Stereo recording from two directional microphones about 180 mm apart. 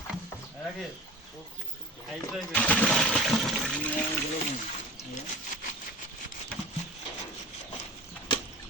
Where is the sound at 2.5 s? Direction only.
5° left (ahead or behind).